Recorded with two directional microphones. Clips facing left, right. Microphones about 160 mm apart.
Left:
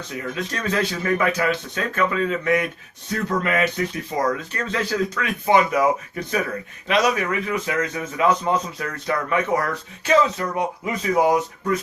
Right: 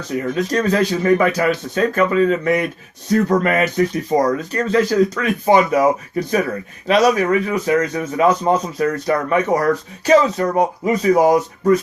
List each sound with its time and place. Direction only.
0.2 s a man's voice: 35° right (ahead or behind)